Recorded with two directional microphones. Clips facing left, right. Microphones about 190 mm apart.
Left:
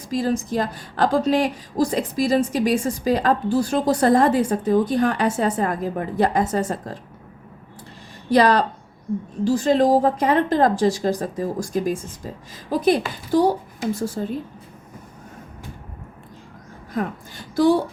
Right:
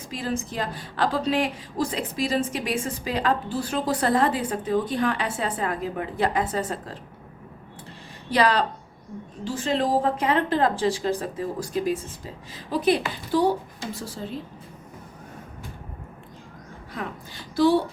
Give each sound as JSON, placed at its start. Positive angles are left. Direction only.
{"t": 0.1, "sound": "a woman's voice", "side_deg": 40}
{"t": 8.3, "sound": "a woman's voice", "side_deg": 40}
{"t": 16.9, "sound": "a woman's voice", "side_deg": 45}